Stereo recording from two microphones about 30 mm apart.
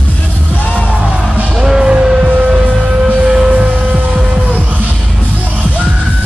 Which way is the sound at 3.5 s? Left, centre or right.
Right.